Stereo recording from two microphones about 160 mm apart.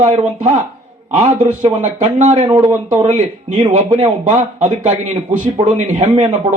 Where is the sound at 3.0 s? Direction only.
45° right (ahead or behind).